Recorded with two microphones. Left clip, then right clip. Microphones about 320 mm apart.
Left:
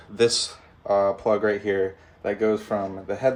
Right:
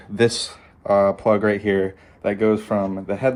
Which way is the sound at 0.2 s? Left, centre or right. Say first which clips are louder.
Right 1 dB; right.